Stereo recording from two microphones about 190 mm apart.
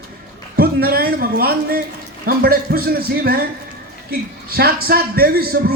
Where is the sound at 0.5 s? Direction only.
55° right (ahead or behind).